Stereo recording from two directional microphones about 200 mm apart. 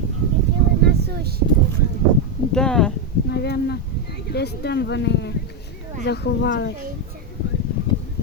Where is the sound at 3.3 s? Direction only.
55° left (ahead or behind).